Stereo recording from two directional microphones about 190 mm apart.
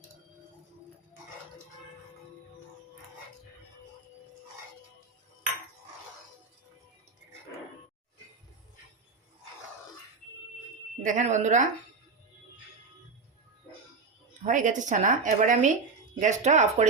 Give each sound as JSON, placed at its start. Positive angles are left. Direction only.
{"t": 11.0, "sound": "a woman's voice", "side_deg": -40}
{"t": 14.4, "sound": "a woman's voice", "side_deg": -40}